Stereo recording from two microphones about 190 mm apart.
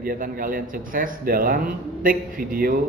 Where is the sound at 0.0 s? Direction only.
50° right (ahead or behind).